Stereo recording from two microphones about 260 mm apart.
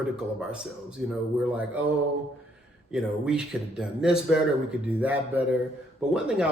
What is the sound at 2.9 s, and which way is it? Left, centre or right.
Speech, centre.